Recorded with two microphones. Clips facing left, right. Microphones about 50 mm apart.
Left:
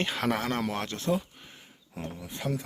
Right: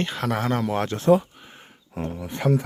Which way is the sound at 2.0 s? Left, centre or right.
Right.